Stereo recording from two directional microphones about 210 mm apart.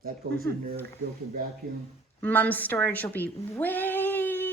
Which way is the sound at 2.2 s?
10° left (ahead or behind).